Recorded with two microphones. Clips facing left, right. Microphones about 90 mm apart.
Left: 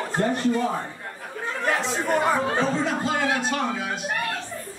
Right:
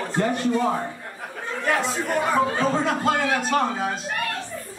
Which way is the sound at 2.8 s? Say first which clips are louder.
Right 2 dB; 50° right (ahead or behind).